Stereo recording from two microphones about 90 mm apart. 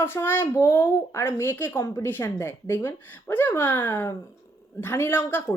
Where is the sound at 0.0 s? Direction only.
25° left (ahead or behind).